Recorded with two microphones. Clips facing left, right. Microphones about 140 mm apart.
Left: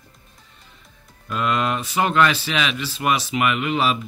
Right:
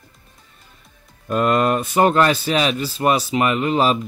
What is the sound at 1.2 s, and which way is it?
Speech, 45° right (ahead or behind).